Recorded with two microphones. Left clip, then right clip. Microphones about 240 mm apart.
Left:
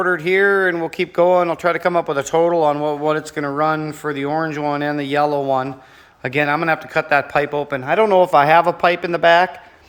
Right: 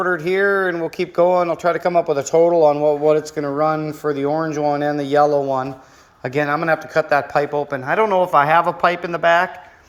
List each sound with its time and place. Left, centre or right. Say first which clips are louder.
0.0 s speech: left 2 dB; centre